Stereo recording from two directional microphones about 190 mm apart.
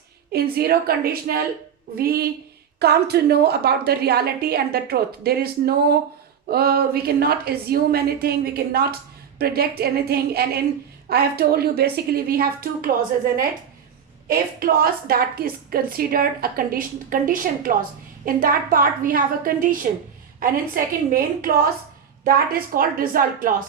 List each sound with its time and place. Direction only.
0.3 s a woman's voice: 55° right (ahead or behind)
14.3 s a woman's voice: 50° right (ahead or behind)